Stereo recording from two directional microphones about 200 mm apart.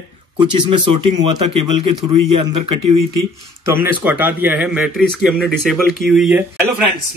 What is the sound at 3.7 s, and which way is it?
Speech, 10° right (ahead or behind).